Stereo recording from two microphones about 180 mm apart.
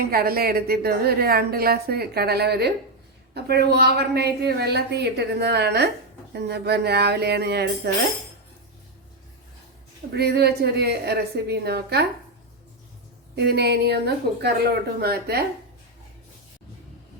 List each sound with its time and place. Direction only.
0.0 s a woman's voice: 55° right (ahead or behind)
10.2 s a woman's voice: 65° right (ahead or behind)
13.3 s a woman's voice: 65° right (ahead or behind)